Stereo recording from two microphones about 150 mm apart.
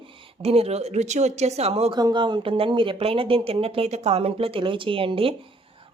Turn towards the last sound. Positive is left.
turn(degrees=-40)  # may be behind; listen again after turning